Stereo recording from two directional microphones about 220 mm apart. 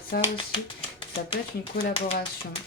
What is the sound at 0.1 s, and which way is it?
Speech, 45° left (ahead or behind).